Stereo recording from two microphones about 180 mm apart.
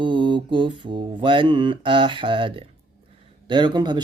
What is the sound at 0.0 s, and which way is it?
Music, 25° right (ahead or behind).